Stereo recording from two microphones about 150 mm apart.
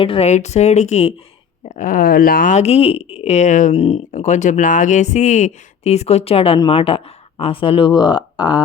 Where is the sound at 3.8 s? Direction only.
45° left (ahead or behind).